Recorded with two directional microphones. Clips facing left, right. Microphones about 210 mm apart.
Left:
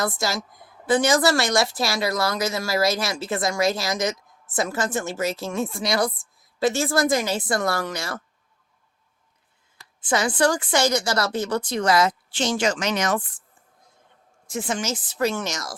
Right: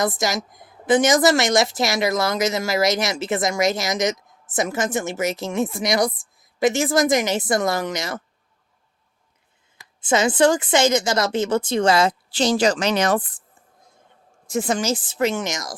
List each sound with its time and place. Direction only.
0.0 s a woman's voice: 20° right (ahead or behind)
9.7 s a woman's voice: 20° right (ahead or behind)
14.4 s speech: 40° right (ahead or behind)
15.2 s speech: 15° right (ahead or behind)